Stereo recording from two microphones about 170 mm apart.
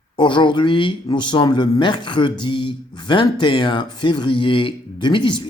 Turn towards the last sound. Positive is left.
turn(degrees=25)  # may be behind; listen again after turning